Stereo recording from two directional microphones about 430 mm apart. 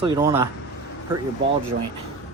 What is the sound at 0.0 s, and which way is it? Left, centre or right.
Speech, centre.